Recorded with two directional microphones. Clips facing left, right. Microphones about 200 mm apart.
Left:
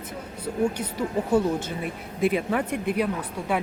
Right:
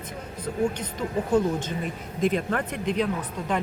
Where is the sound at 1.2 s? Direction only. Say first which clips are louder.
Even; 10° left (ahead or behind).